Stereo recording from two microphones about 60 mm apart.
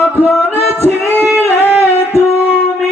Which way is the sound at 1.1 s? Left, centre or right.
Right.